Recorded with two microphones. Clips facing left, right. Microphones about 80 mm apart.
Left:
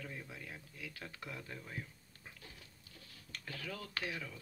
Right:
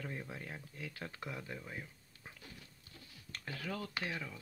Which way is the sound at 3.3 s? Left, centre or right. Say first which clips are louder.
Right 3 dB; right.